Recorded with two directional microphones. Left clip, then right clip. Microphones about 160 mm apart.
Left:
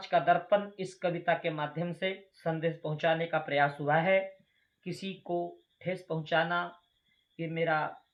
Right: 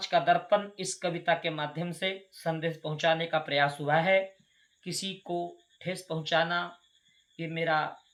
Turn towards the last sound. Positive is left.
turn(degrees=-15)  # may be behind; listen again after turning